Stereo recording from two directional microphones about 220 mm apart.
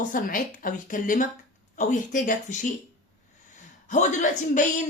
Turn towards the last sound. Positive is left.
turn(degrees=35)  # may be behind; listen again after turning